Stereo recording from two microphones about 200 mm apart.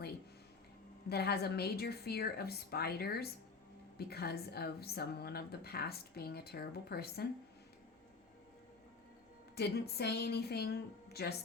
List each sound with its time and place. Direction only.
1.1 s a woman's voice: 55° left (ahead or behind)
9.6 s a woman's voice: 55° left (ahead or behind)